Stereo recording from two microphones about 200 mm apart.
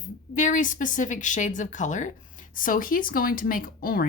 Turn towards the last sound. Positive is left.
turn(degrees=45)  # may be behind; listen again after turning